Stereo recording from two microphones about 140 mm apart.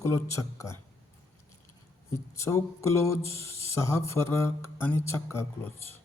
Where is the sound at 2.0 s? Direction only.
20° left (ahead or behind).